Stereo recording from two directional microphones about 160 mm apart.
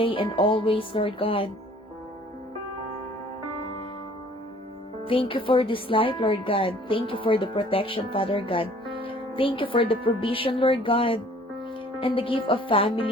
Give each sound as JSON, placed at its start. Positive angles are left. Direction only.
{"t": 0.0, "sound": "speech", "side_deg": 35}
{"t": 5.0, "sound": "speech", "side_deg": 35}